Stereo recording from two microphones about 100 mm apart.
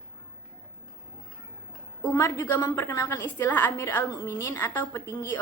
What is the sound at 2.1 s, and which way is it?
A woman's voice, 30° left (ahead or behind).